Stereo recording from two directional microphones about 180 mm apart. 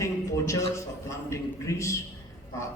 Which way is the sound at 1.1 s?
15° left (ahead or behind).